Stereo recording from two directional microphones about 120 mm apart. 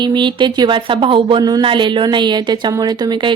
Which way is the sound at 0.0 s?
40° right (ahead or behind).